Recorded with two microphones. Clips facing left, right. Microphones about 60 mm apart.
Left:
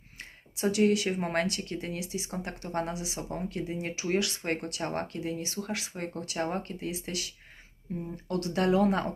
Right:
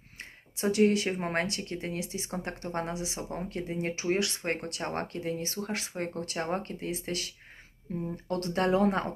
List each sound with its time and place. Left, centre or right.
0.2 s speech: right
4.0 s speech: right